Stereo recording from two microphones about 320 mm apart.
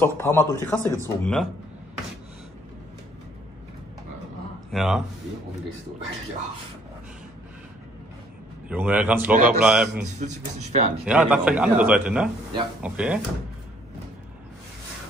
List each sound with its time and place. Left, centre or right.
0.0 s speech: centre
4.7 s a man's voice: centre
8.6 s a man's voice: centre
9.3 s speech: right
9.6 s a man's voice: centre
10.1 s speech: right
11.1 s a man's voice: centre